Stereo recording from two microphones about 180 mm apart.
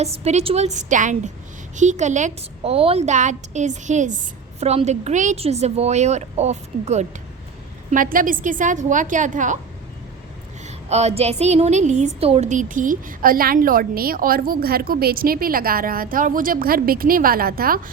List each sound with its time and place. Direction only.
0.0 s a woman's voice: 35° right (ahead or behind)
7.9 s a woman's voice: 50° right (ahead or behind)
10.8 s a woman's voice: 35° right (ahead or behind); by 17.7 s 55° right (ahead or behind)